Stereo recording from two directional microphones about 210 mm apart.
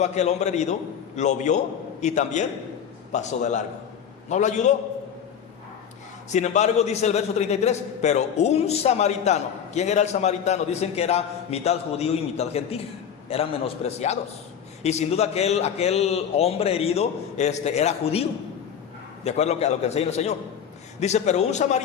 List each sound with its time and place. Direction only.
0.0 s a man's voice: 30° left (ahead or behind)
6.3 s a man's voice: 35° left (ahead or behind)
19.2 s a man's voice: 30° left (ahead or behind)